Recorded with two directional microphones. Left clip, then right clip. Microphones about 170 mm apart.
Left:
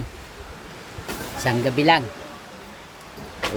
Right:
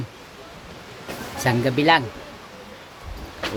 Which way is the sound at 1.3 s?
15° right (ahead or behind).